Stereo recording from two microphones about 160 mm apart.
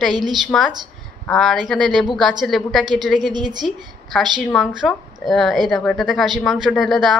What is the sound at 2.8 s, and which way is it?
Speech, 25° right (ahead or behind).